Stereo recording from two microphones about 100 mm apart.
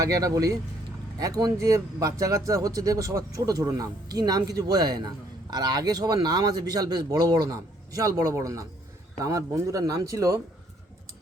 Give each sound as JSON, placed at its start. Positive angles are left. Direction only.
{"t": 0.0, "sound": "speech", "side_deg": -35}